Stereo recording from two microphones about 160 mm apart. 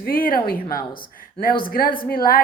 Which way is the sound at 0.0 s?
65° left (ahead or behind).